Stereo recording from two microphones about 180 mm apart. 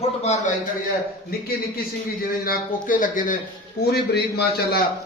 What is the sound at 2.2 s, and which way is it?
A man's voice, 55° left (ahead or behind).